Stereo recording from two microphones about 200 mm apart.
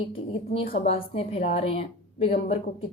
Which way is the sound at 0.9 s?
30° left (ahead or behind).